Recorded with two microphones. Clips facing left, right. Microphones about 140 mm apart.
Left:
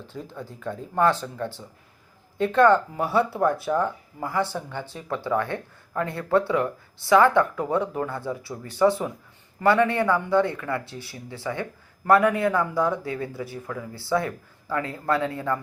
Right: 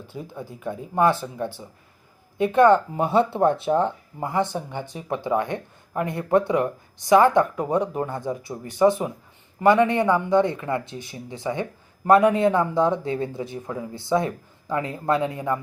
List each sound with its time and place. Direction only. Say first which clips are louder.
0.0 s speech: right 1 dB; 10° right (ahead or behind)